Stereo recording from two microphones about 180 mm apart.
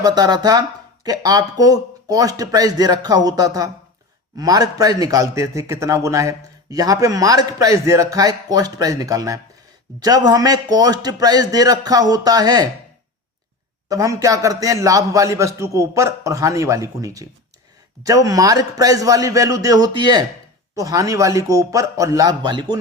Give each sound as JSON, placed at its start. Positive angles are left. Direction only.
{"t": 0.0, "sound": "a man's voice", "side_deg": -20}
{"t": 13.8, "sound": "a man's voice", "side_deg": -20}